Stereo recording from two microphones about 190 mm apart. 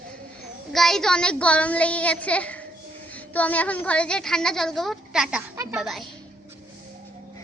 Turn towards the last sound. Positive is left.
turn(degrees=0)  # may be behind; listen again after turning